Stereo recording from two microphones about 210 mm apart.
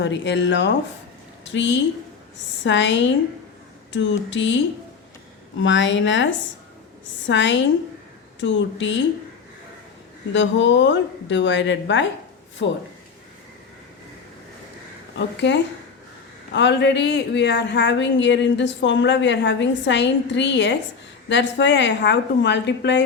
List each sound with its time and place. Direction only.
0.0 s speech: 60° left (ahead or behind)
7.3 s speech: 60° left (ahead or behind)
10.3 s speech: 60° left (ahead or behind)
15.4 s speech: 55° left (ahead or behind)